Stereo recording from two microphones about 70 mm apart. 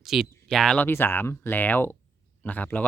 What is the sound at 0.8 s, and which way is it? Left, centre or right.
Speech, left.